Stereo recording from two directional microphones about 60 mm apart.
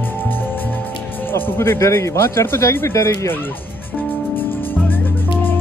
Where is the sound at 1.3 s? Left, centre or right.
Left.